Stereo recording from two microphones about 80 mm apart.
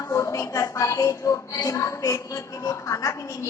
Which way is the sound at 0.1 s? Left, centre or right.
Left.